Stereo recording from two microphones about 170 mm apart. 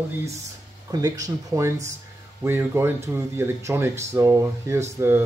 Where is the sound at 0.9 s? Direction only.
20° right (ahead or behind).